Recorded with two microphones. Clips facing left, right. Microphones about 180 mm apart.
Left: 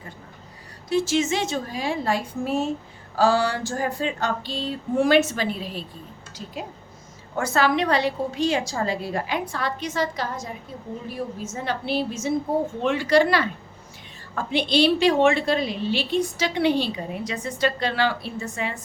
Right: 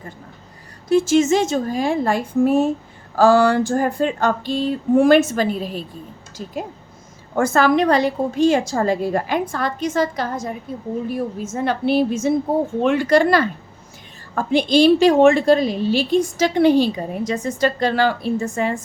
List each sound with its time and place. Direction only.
0.9 s a woman's voice: 50° right (ahead or behind)